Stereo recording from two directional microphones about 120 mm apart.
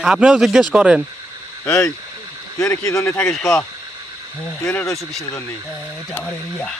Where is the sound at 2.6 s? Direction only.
25° left (ahead or behind).